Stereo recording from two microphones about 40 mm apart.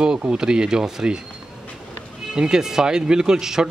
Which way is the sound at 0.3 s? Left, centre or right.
Right.